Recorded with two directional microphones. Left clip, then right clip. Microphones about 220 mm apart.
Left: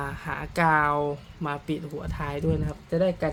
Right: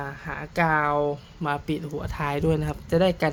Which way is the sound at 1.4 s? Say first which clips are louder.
Right 3 dB; 15° right (ahead or behind).